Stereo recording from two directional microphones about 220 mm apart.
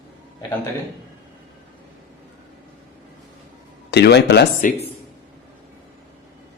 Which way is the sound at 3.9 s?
50° left (ahead or behind).